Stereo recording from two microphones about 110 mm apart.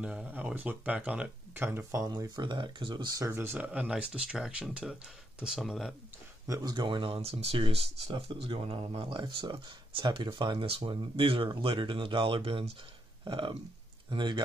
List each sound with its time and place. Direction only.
0.0 s speech: 10° right (ahead or behind)
1.5 s speech: 20° right (ahead or behind)
2.0 s speech: 40° right (ahead or behind)
3.3 s speech: 20° right (ahead or behind); by 5.9 s centre (ahead or behind)
6.4 s speech: 30° right (ahead or behind)
6.7 s speech: 45° right (ahead or behind)
10.8 s speech: 50° right (ahead or behind)
13.2 s speech: 45° right (ahead or behind)